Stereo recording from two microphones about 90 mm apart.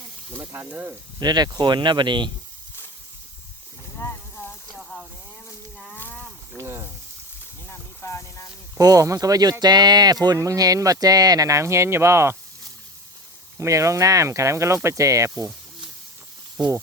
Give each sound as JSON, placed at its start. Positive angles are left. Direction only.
{"t": 0.3, "sound": "speech", "side_deg": -30}
{"t": 0.7, "sound": "speech", "side_deg": -20}
{"t": 1.2, "sound": "speech", "side_deg": -50}
{"t": 4.0, "sound": "a sound", "side_deg": 25}
{"t": 4.7, "sound": "a sound", "side_deg": 5}
{"t": 6.0, "sound": "livestock", "side_deg": 20}
{"t": 6.6, "sound": "speech", "side_deg": -30}
{"t": 7.7, "sound": "a sound", "side_deg": 30}
{"t": 8.8, "sound": "speech", "side_deg": -40}
{"t": 13.6, "sound": "speech", "side_deg": -35}